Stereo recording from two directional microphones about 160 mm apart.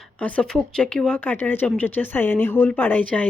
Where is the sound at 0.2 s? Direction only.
10° left (ahead or behind).